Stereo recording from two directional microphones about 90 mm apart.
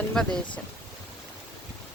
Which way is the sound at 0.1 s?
10° left (ahead or behind).